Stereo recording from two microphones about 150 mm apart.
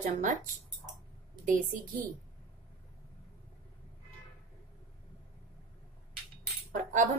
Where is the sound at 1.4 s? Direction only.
60° right (ahead or behind).